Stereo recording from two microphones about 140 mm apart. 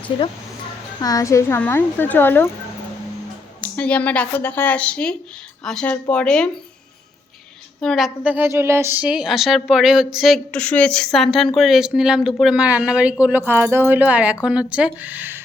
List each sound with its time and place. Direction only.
0.1 s speech: 40° left (ahead or behind)
1.0 s speech: 25° left (ahead or behind)
3.6 s speech: 10° left (ahead or behind)
7.8 s a woman's voice: centre (ahead or behind)